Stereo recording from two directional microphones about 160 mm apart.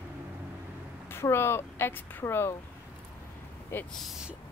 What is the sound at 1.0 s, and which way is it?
Speech, 15° left (ahead or behind).